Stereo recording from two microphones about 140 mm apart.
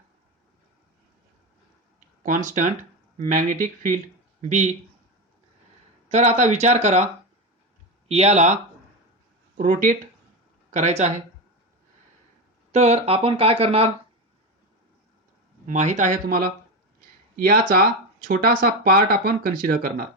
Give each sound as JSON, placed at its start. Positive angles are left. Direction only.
{"t": 2.2, "sound": "speech", "side_deg": -65}
{"t": 6.1, "sound": "speech", "side_deg": -50}
{"t": 9.6, "sound": "speech", "side_deg": -70}
{"t": 10.7, "sound": "speech", "side_deg": -55}
{"t": 12.7, "sound": "speech", "side_deg": -50}
{"t": 15.6, "sound": "speech", "side_deg": -60}
{"t": 17.3, "sound": "speech", "side_deg": -90}